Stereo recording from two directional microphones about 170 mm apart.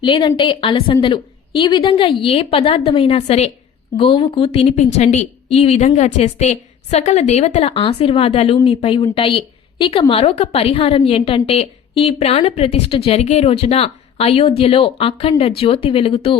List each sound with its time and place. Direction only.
0.0 s a woman's voice: 30° left (ahead or behind)